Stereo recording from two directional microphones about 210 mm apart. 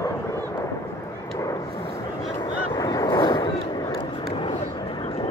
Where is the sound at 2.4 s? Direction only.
20° left (ahead or behind).